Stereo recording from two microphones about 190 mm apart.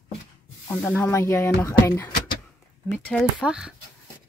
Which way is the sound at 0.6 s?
10° left (ahead or behind).